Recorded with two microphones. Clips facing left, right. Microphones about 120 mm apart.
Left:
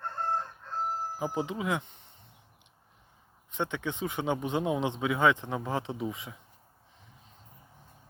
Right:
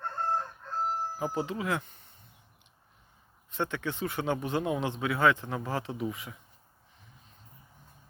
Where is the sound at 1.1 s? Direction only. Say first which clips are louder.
Even; 15° left (ahead or behind).